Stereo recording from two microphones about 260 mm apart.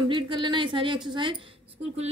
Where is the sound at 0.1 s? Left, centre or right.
Centre.